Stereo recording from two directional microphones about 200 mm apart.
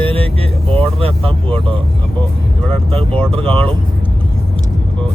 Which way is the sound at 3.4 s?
5° left (ahead or behind).